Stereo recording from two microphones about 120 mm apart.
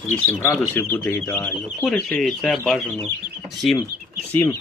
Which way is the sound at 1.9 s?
Centre (ahead or behind).